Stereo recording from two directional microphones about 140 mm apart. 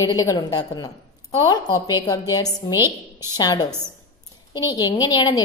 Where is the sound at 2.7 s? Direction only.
15° right (ahead or behind).